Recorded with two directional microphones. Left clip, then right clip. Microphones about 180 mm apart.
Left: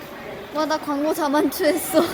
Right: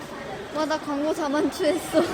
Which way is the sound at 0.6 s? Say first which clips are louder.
Left 4 dB; 15° left (ahead or behind).